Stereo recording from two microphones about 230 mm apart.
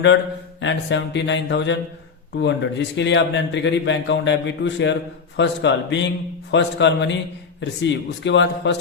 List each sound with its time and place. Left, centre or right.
0.6 s a man's voice: left